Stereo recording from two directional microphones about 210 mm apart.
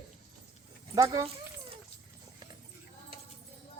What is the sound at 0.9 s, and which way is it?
Speech, 15° right (ahead or behind).